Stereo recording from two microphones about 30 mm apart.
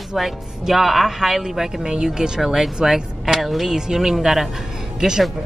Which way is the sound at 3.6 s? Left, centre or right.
Right.